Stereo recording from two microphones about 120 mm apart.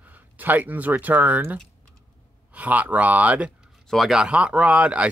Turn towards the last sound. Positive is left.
turn(degrees=-10)  # may be behind; listen again after turning